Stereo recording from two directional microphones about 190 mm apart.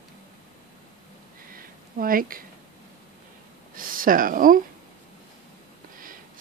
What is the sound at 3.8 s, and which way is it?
Speech, 45° right (ahead or behind).